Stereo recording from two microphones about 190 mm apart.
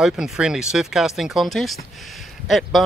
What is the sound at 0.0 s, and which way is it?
Speech, 5° right (ahead or behind).